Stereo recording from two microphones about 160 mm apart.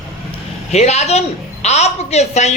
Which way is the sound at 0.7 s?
45° left (ahead or behind).